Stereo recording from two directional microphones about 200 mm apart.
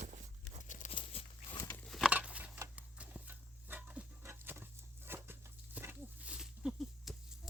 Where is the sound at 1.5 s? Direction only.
15° left (ahead or behind).